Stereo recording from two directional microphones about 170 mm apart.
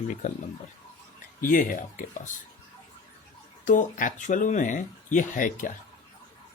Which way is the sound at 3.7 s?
50° left (ahead or behind).